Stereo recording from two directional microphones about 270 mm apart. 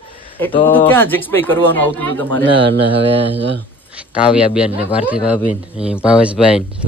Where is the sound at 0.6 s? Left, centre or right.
Centre.